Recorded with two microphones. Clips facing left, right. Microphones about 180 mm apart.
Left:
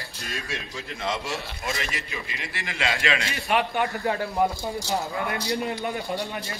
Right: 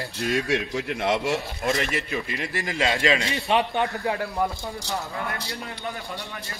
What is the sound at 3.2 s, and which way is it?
Speech, 20° right (ahead or behind).